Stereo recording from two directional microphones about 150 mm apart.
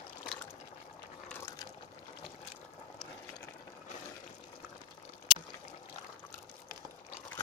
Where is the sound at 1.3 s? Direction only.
15° left (ahead or behind).